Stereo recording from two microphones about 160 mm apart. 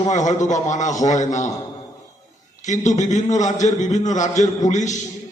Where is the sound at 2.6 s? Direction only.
50° left (ahead or behind).